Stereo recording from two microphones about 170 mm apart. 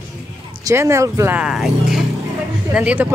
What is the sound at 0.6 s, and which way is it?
A man's voice, 15° right (ahead or behind).